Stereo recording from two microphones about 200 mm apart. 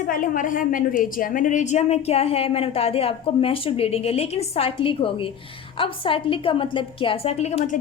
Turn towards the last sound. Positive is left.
turn(degrees=35)  # may be behind; listen again after turning